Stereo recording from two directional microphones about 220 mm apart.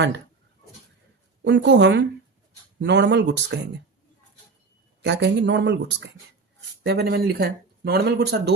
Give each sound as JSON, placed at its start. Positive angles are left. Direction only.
{"t": 1.5, "sound": "speech", "side_deg": -50}
{"t": 5.0, "sound": "speech", "side_deg": -50}